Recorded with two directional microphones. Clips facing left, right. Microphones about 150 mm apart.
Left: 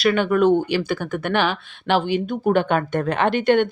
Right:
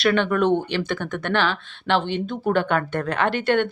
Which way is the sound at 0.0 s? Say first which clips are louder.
Left 2 dB; 10° left (ahead or behind).